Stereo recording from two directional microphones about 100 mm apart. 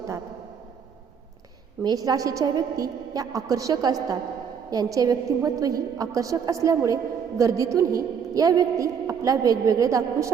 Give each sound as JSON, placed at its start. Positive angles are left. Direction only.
{"t": 1.8, "sound": "a woman's voice", "side_deg": -40}